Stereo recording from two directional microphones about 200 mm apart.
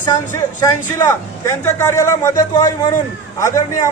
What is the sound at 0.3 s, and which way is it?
Speech, 15° left (ahead or behind).